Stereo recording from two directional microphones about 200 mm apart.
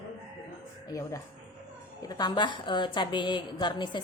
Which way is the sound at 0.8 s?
15° left (ahead or behind).